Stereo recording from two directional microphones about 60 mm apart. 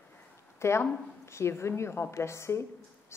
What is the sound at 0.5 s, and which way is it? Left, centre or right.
A woman's voice, left.